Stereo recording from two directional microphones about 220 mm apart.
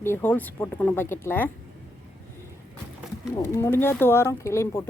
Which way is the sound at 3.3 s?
10° left (ahead or behind).